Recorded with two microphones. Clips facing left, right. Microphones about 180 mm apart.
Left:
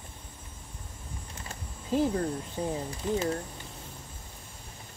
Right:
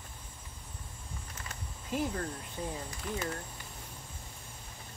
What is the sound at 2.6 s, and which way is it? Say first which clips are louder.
Speech: left 5 dB; 20° left (ahead or behind).